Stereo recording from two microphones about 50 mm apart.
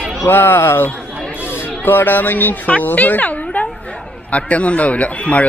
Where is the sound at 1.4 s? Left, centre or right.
Right.